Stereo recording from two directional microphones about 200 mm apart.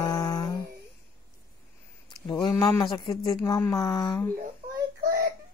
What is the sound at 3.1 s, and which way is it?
Speech, 20° left (ahead or behind).